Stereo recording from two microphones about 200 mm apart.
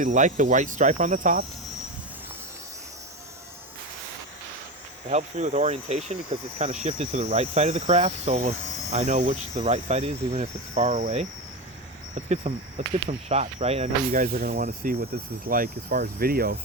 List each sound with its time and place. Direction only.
0.0 s speech: 40° right (ahead or behind)
5.0 s speech: 35° right (ahead or behind)